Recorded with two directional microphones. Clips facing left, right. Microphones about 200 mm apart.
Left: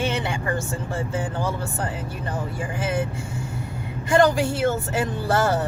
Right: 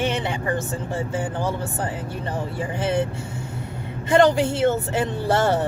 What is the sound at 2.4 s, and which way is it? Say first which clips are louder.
Speech: right 2 dB; 30° right (ahead or behind).